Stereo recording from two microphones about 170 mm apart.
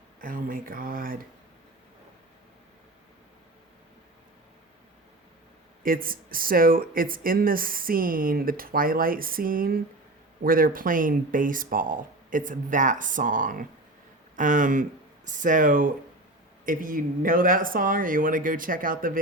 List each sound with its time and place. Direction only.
0.2 s speech: 55° right (ahead or behind)
5.8 s speech: 55° right (ahead or behind)